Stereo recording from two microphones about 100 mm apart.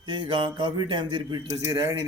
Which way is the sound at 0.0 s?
50° right (ahead or behind).